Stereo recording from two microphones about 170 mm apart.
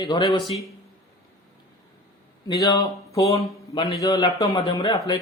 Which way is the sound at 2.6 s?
20° left (ahead or behind).